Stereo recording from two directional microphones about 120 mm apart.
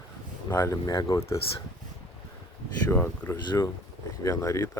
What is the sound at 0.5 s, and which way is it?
Speech, 25° left (ahead or behind).